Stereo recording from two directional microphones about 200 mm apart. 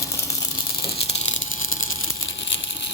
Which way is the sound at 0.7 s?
50° left (ahead or behind).